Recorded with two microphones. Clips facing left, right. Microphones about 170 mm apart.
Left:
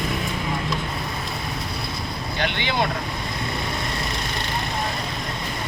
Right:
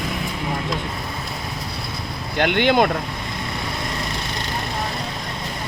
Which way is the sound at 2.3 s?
55° right (ahead or behind).